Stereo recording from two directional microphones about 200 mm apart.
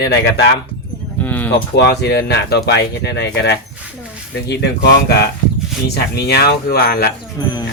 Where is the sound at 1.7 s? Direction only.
55° left (ahead or behind).